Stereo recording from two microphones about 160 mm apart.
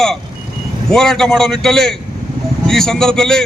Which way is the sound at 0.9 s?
5° left (ahead or behind).